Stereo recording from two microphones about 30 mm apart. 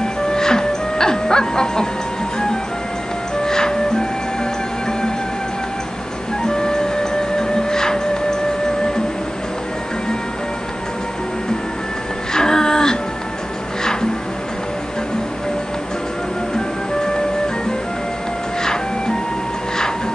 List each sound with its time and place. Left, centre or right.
0.0 s music: left
3.4 s music: left
6.4 s music: left
12.4 s music: left
18.6 s music: left